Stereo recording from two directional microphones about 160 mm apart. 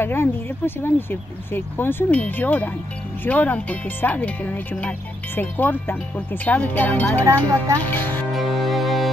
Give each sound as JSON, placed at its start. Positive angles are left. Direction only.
{"t": 0.0, "sound": "speech", "side_deg": 15}
{"t": 7.2, "sound": "speech", "side_deg": -20}
{"t": 7.8, "sound": "speech", "side_deg": 10}
{"t": 8.3, "sound": "music", "side_deg": 0}